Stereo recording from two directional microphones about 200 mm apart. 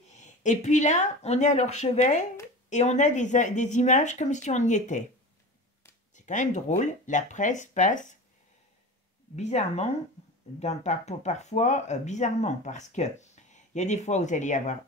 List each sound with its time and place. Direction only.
0.1 s speech: 35° left (ahead or behind)
6.1 s speech: 40° left (ahead or behind)
9.3 s speech: 35° left (ahead or behind)